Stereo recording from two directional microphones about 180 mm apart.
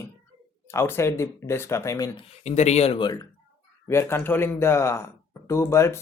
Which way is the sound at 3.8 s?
15° left (ahead or behind).